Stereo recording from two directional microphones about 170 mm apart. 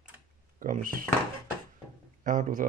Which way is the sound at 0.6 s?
55° right (ahead or behind).